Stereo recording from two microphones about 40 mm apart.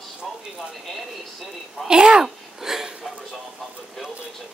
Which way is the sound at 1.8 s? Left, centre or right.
Right.